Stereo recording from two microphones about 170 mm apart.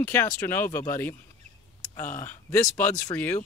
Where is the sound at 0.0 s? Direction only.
10° left (ahead or behind).